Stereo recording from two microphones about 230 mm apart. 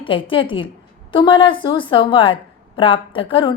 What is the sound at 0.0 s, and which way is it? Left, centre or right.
A woman's voice, left.